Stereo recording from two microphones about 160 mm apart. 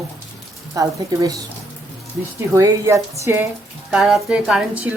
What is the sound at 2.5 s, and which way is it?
Speech, 20° right (ahead or behind).